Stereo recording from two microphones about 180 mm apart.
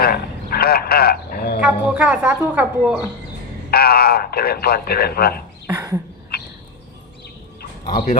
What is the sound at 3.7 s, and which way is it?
Speech, 60° left (ahead or behind).